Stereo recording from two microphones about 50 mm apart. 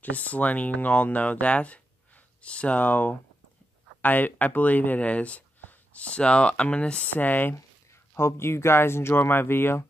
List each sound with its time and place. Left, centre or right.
0.0 s speech: left
7.2 s speech: left
8.1 s speech: left